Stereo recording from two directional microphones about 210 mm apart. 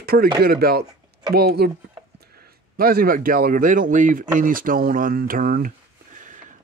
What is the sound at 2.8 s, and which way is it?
Speech, 45° right (ahead or behind).